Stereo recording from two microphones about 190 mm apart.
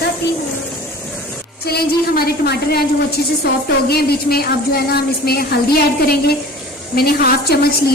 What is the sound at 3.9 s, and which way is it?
A woman's voice, 55° left (ahead or behind).